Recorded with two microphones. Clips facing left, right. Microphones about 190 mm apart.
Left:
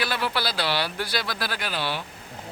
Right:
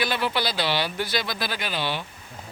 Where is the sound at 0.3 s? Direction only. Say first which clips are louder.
Right 1 dB; 5° left (ahead or behind).